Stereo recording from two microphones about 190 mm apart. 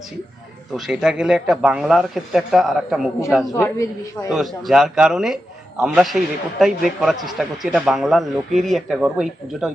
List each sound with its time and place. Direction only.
0.7 s a man's voice: centre (ahead or behind)
3.5 s a man's voice: 15° left (ahead or behind)
4.3 s a man's voice: centre (ahead or behind)